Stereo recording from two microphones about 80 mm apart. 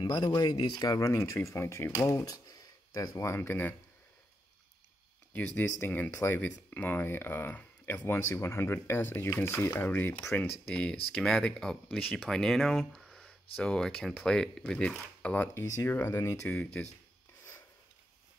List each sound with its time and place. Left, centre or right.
0.0 s speech: left
0.9 s speech: left
2.0 s speech: left
5.3 s speech: left
8.1 s speech: left
10.7 s speech: centre
15.6 s speech: left
16.4 s speech: left